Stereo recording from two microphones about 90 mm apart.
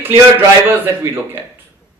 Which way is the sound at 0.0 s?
20° right (ahead or behind).